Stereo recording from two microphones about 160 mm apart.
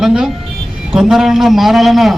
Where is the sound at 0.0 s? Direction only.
5° right (ahead or behind).